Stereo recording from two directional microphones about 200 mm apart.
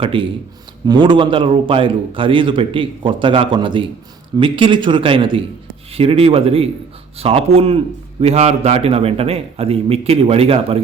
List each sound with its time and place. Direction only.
0.0 s a man's voice: 25° right (ahead or behind)